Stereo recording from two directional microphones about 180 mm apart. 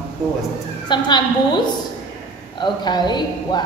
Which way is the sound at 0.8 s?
25° left (ahead or behind).